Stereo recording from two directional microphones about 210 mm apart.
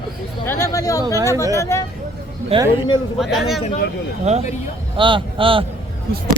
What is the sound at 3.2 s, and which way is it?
Speech, centre (ahead or behind).